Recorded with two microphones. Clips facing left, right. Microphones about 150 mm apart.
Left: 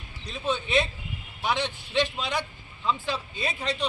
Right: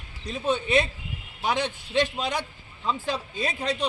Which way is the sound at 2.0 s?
45° right (ahead or behind).